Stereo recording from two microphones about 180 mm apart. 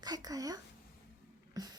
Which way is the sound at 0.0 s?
20° right (ahead or behind).